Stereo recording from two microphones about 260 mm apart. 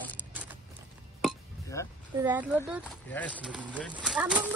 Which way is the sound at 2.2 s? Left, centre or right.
Centre.